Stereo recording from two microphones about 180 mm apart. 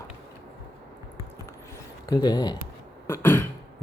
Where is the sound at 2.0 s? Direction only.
25° left (ahead or behind).